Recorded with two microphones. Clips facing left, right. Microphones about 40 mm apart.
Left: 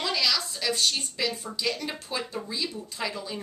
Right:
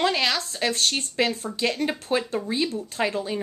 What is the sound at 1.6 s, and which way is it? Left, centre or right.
Speech, right.